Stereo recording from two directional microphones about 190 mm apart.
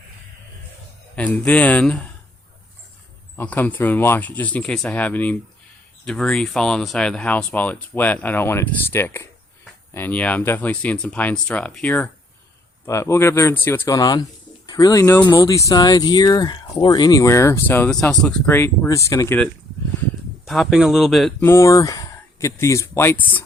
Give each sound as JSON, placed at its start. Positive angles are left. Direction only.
{"t": 1.1, "sound": "speech", "side_deg": 5}
{"t": 3.3, "sound": "speech", "side_deg": 10}
{"t": 20.5, "sound": "speech", "side_deg": 0}
{"t": 21.4, "sound": "speech", "side_deg": 15}